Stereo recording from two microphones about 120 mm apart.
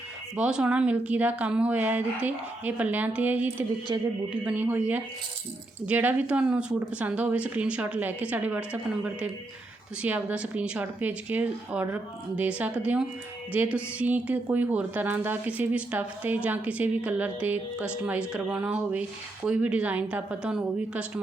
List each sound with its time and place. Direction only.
0.3 s a woman's voice: 10° right (ahead or behind)